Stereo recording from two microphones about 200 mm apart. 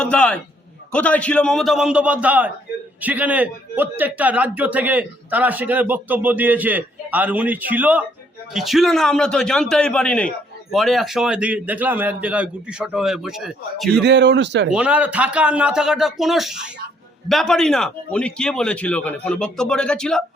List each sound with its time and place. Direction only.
0.0 s a man's voice: 5° left (ahead or behind)
14.0 s speech: 60° right (ahead or behind)
14.7 s a man's voice: 5° right (ahead or behind)